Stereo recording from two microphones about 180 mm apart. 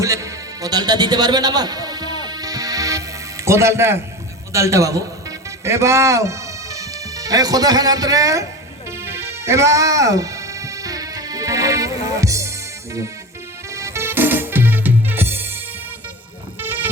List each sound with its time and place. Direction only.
0.0 s music: 15° right (ahead or behind)
4.5 s a man's voice: 15° right (ahead or behind)
9.0 s music: 15° right (ahead or behind)
13.7 s music: 15° right (ahead or behind)
16.6 s a sound: 10° right (ahead or behind)